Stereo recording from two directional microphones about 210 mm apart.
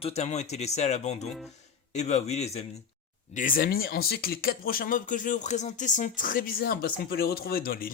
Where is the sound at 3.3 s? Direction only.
40° left (ahead or behind).